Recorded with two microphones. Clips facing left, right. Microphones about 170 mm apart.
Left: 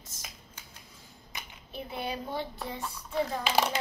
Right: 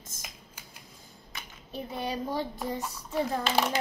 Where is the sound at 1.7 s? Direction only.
40° right (ahead or behind).